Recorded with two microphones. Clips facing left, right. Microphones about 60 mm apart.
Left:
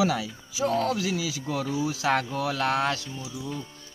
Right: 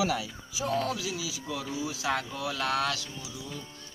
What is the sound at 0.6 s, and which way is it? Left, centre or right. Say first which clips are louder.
Speech: left 5 dB; left.